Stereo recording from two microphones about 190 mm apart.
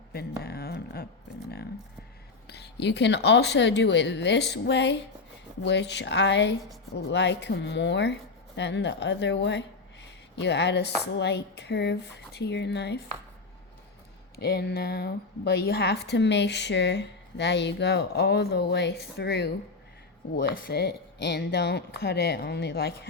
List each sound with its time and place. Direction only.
0.1 s a sound: 55° left (ahead or behind)
2.5 s speech: 60° left (ahead or behind)
14.3 s speech: 55° left (ahead or behind)
20.3 s speech: 50° left (ahead or behind)